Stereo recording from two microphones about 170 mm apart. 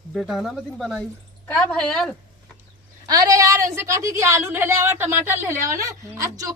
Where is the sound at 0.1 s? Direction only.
Centre (ahead or behind).